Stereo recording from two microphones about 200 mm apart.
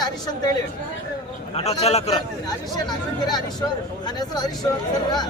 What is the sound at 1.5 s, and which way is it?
Speech, 30° left (ahead or behind).